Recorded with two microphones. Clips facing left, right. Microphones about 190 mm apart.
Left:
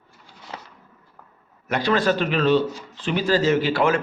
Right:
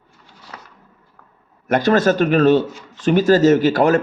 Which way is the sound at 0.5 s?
30° left (ahead or behind).